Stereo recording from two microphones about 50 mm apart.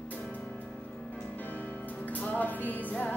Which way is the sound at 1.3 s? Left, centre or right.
Left.